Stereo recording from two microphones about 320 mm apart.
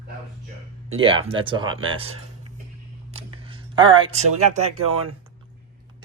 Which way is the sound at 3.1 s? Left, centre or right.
Centre.